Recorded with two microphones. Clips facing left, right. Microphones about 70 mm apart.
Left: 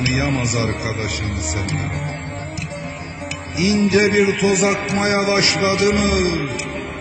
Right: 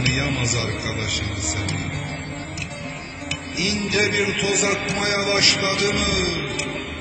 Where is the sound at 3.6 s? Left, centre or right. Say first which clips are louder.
Left 7 dB; left.